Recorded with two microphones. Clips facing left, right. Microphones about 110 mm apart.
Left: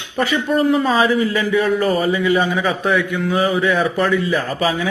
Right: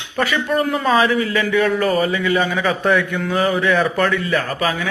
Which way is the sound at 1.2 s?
20° left (ahead or behind).